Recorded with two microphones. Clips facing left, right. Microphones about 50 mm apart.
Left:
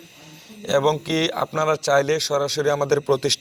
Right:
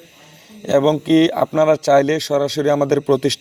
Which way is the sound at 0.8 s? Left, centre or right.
Right.